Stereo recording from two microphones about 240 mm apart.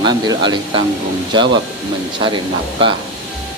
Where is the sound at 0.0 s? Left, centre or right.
Centre.